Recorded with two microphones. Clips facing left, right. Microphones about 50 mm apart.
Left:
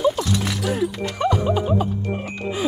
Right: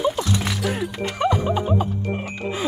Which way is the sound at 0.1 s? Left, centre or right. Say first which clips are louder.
Left 1 dB; centre.